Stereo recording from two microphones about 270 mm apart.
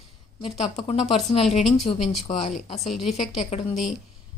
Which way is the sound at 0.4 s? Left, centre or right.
Left.